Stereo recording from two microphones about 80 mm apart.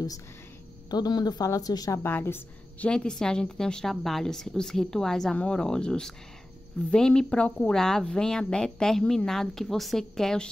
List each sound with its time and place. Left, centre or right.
0.8 s speech: left
2.0 s a woman's voice: left
2.9 s a woman's voice: centre